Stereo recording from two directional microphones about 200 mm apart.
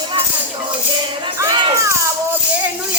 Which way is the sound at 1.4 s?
15° right (ahead or behind).